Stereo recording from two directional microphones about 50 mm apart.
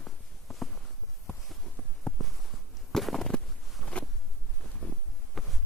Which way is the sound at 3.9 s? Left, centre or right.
Left.